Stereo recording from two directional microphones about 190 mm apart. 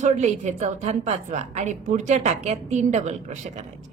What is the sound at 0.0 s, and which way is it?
A woman's voice, 35° right (ahead or behind).